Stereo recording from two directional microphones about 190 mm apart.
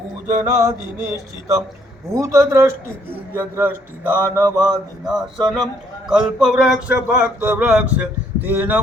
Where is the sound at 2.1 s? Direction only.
15° right (ahead or behind).